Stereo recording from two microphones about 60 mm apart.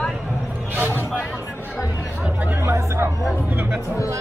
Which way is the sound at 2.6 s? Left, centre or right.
Right.